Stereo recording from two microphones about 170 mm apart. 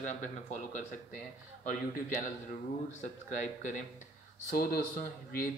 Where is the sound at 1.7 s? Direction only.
55° left (ahead or behind).